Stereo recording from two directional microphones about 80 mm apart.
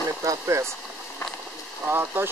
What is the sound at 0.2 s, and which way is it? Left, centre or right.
Speech, right.